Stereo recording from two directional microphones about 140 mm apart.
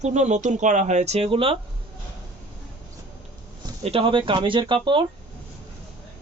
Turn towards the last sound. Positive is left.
turn(degrees=-35)  # may be behind; listen again after turning